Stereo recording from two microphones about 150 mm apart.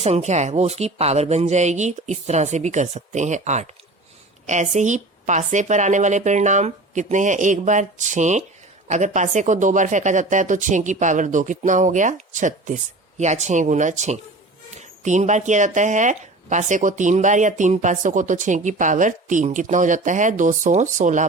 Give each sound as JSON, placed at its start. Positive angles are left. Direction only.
{"t": 0.0, "sound": "speech", "side_deg": -45}